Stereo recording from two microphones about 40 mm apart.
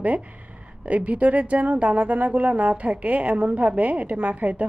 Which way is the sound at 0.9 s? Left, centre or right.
Right.